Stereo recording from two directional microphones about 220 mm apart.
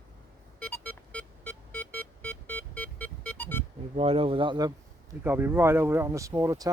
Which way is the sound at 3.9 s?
25° right (ahead or behind).